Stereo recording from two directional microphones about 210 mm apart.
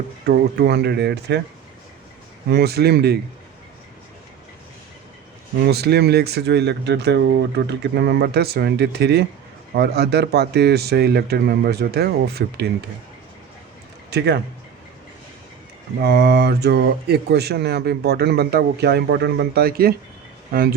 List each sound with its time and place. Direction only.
0.3 s speech: 50° right (ahead or behind)
2.5 s speech: 50° right (ahead or behind)
5.6 s speech: 50° right (ahead or behind)
14.1 s speech: 55° right (ahead or behind)
16.0 s speech: 50° right (ahead or behind)